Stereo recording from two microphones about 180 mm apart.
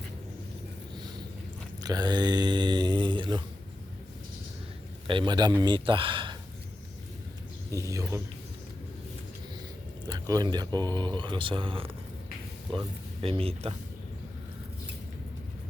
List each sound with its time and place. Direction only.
1.8 s mantra: 20° right (ahead or behind)
5.0 s speech: 25° right (ahead or behind)
7.7 s speech: 20° right (ahead or behind)
10.1 s speech: 20° right (ahead or behind)
13.2 s speech: 30° right (ahead or behind)